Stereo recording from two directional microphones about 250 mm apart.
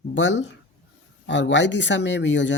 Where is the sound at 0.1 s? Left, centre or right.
Left.